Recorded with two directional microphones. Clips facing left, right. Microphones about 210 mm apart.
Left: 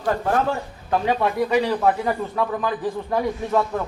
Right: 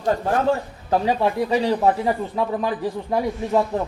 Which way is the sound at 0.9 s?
30° right (ahead or behind).